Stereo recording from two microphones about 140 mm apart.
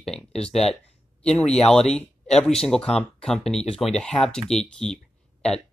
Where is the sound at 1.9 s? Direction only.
5° left (ahead or behind).